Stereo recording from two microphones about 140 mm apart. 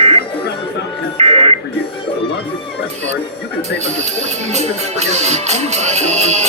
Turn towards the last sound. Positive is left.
turn(degrees=-50)  # may be behind; listen again after turning